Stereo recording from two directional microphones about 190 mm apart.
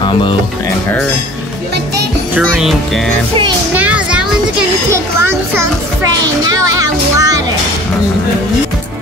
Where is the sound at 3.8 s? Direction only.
5° right (ahead or behind).